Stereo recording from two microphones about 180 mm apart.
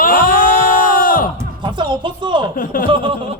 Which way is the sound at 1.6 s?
25° right (ahead or behind).